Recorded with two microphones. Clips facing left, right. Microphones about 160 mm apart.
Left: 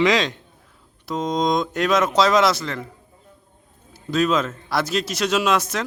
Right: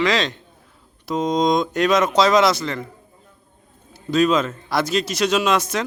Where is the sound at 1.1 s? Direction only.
Centre (ahead or behind).